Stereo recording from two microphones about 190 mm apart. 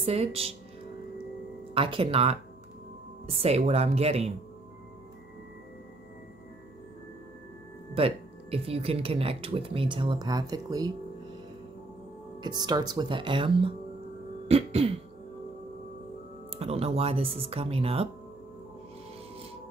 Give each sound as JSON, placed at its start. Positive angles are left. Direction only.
{"t": 0.0, "sound": "speech", "side_deg": -30}
{"t": 1.7, "sound": "speech", "side_deg": -30}
{"t": 3.4, "sound": "speech", "side_deg": -35}
{"t": 7.9, "sound": "speech", "side_deg": -30}
{"t": 12.4, "sound": "speech", "side_deg": -20}
{"t": 16.5, "sound": "speech", "side_deg": -30}